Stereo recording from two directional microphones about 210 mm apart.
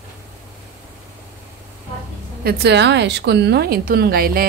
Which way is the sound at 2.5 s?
50° right (ahead or behind).